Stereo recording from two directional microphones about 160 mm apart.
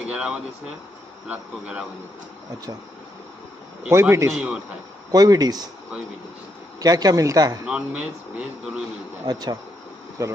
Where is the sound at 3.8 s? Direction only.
15° right (ahead or behind).